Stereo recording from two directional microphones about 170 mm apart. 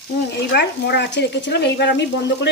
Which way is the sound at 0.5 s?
75° left (ahead or behind).